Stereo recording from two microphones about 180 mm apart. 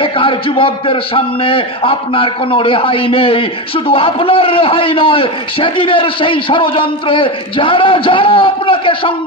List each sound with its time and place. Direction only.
0.0 s a man's voice: 30° left (ahead or behind)